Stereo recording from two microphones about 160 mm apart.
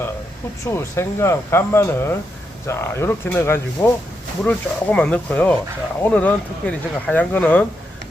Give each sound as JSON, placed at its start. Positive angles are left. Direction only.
{"t": 0.7, "sound": "speech", "side_deg": 15}